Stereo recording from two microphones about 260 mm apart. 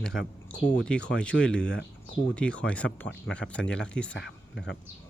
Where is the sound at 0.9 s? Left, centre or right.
Centre.